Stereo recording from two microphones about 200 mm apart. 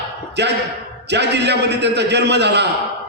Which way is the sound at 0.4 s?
60° right (ahead or behind).